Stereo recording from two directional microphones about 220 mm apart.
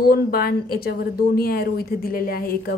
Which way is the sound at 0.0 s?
45° left (ahead or behind).